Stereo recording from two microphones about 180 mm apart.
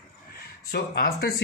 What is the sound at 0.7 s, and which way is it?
Speech, 60° left (ahead or behind).